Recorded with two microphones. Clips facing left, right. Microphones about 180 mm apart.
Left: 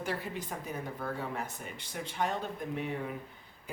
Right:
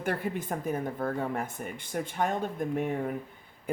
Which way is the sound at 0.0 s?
55° right (ahead or behind).